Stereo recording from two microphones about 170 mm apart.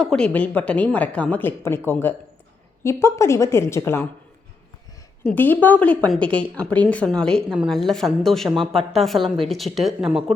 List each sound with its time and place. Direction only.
0.0 s a woman's voice: 5° left (ahead or behind)
5.2 s a woman's voice: 10° left (ahead or behind)